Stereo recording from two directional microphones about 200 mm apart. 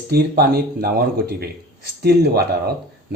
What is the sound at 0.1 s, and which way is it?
Speech, 50° right (ahead or behind).